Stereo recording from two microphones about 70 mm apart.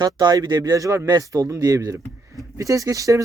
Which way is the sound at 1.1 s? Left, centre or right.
Right.